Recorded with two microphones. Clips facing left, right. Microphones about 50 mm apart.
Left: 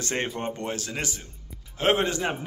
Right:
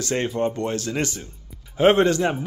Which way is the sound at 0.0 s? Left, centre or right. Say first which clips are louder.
Right 4 dB; left.